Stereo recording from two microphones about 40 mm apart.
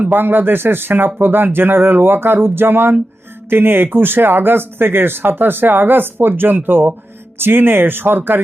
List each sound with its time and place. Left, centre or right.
0.0 s speech: right
7.3 s speech: right